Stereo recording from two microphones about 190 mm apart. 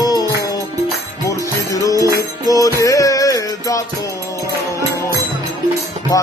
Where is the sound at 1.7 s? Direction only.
15° left (ahead or behind).